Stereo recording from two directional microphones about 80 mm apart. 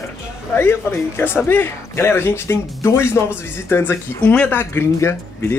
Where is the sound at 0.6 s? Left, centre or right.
Left.